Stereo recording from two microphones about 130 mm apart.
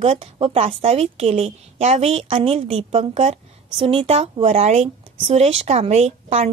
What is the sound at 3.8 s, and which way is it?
A woman's voice, 45° right (ahead or behind).